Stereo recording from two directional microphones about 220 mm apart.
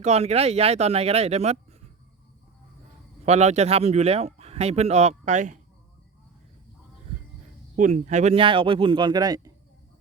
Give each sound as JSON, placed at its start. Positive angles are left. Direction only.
{"t": 0.0, "sound": "speech", "side_deg": -30}
{"t": 3.2, "sound": "speech", "side_deg": -30}
{"t": 7.8, "sound": "speech", "side_deg": -35}